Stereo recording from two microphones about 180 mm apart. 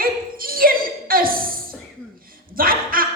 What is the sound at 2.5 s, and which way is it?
Speech, 55° right (ahead or behind).